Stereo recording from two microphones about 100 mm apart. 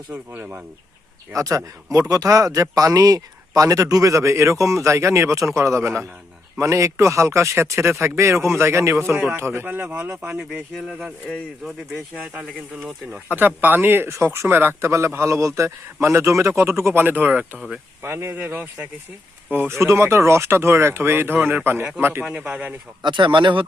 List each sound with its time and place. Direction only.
0.1 s speech: 20° right (ahead or behind)
1.3 s speech: 35° right (ahead or behind)
10.2 s speech: 10° right (ahead or behind)
12.1 s speech: 10° right (ahead or behind)
22.2 s speech: 10° right (ahead or behind)
23.0 s speech: 55° right (ahead or behind)